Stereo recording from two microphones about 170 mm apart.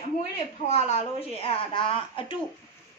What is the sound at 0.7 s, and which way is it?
A woman's voice, 40° left (ahead or behind).